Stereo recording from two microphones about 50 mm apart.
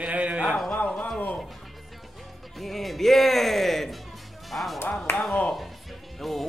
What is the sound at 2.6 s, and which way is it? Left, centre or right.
Speech, centre.